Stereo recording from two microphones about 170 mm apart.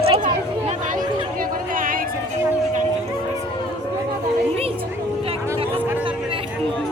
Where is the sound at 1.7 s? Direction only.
55° right (ahead or behind).